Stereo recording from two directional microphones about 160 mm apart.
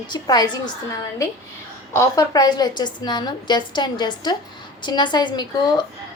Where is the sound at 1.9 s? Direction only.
20° left (ahead or behind).